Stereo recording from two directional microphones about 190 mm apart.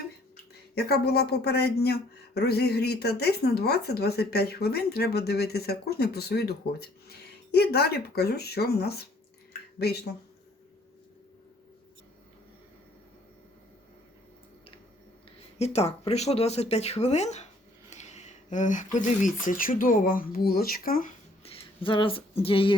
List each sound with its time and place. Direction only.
0.8 s speech: 55° left (ahead or behind)
9.5 s drip: 55° left (ahead or behind)
15.5 s speech: 35° left (ahead or behind)
21.4 s speech: 30° left (ahead or behind)